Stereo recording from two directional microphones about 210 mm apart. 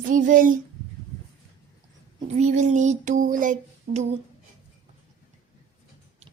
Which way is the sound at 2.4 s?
35° right (ahead or behind).